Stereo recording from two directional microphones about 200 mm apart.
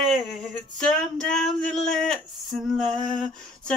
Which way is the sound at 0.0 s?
Centre (ahead or behind).